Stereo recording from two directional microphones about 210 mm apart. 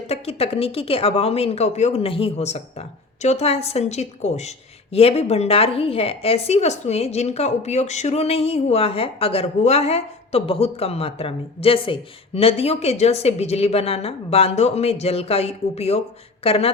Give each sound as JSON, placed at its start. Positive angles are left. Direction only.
{"t": 0.1, "sound": "speech", "side_deg": 30}